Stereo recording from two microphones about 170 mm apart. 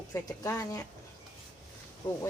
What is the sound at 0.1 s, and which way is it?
Speech, 20° left (ahead or behind).